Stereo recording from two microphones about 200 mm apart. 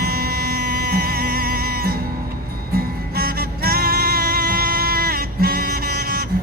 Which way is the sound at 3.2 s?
50° right (ahead or behind).